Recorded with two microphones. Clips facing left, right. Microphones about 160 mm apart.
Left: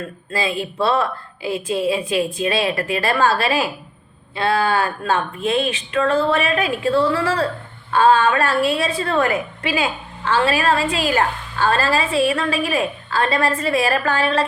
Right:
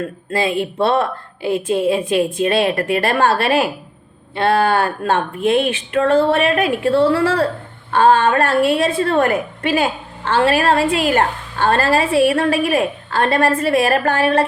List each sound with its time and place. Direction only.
0.3 s a woman's voice: 55° right (ahead or behind)